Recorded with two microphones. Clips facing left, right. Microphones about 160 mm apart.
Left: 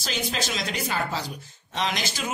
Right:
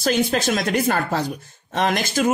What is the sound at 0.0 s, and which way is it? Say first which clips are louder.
Speech: right 10 dB; 55° right (ahead or behind).